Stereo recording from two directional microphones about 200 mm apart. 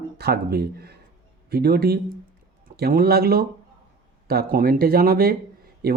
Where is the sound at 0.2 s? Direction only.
50° right (ahead or behind).